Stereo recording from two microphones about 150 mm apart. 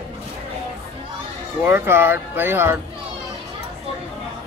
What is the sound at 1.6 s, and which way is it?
Speech, 15° right (ahead or behind).